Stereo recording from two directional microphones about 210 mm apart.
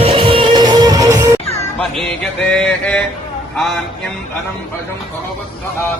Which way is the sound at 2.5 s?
5° left (ahead or behind).